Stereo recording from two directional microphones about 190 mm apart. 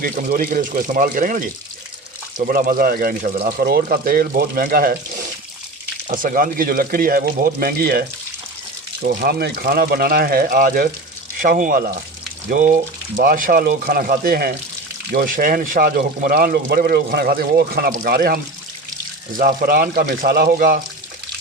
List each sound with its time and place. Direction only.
0.0 s speech: 45° right (ahead or behind)
9.0 s speech: 55° right (ahead or behind)
19.4 s speech: 50° right (ahead or behind)